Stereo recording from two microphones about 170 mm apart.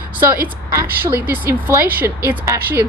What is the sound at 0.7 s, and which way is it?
Speech, 15° right (ahead or behind).